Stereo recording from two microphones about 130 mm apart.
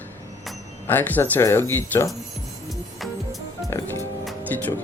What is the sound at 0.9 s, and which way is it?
Speech, 15° left (ahead or behind).